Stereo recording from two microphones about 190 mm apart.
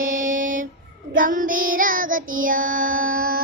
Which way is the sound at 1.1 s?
45° right (ahead or behind).